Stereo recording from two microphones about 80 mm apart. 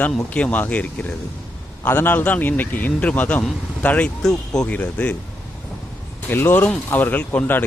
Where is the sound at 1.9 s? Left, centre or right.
Left.